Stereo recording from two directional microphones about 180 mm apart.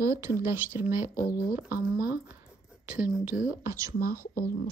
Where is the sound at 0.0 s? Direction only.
15° right (ahead or behind).